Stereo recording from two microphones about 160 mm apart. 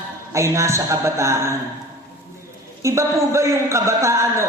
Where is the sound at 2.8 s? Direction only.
20° right (ahead or behind).